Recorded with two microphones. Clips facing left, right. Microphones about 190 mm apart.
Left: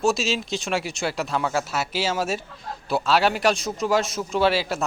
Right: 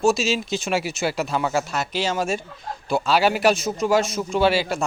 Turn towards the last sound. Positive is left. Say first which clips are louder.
# right 2 dB
turn(degrees=0)  # may be behind; listen again after turning